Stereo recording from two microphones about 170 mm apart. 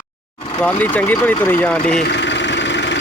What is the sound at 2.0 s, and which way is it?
Vehicle, 90° left.